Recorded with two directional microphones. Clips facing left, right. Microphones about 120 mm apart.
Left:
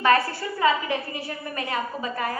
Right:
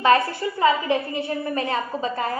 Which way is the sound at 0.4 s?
25° right (ahead or behind).